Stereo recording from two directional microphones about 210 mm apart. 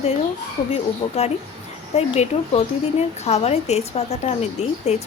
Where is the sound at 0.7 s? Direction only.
30° left (ahead or behind).